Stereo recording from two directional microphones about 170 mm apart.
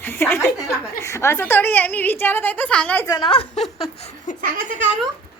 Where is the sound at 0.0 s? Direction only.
10° left (ahead or behind).